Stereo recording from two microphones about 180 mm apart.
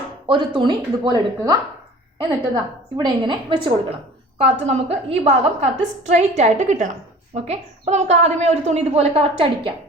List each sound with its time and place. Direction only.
0.3 s speech: 30° right (ahead or behind)
3.0 s a woman's voice: 25° right (ahead or behind)